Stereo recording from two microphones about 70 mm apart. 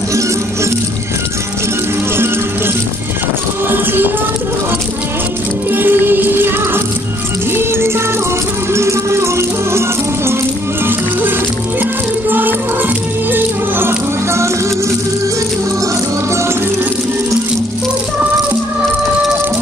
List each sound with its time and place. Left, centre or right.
3.7 s music: right
5.7 s music: right
12.3 s music: right